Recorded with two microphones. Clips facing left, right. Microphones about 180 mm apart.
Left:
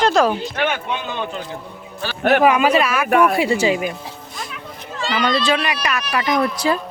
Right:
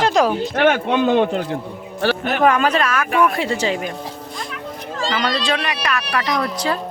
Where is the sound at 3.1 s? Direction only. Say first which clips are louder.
Left 3 dB; 50° left (ahead or behind).